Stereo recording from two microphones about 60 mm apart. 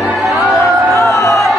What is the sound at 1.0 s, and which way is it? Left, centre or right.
Music, left.